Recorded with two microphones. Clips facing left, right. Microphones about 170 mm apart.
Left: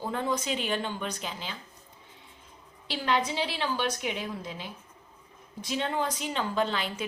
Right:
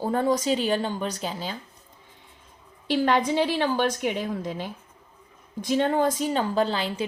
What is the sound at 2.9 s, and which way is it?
A woman's voice, 50° right (ahead or behind).